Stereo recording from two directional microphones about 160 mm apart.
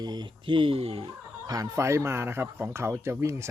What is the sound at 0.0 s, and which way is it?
Speech, 25° right (ahead or behind).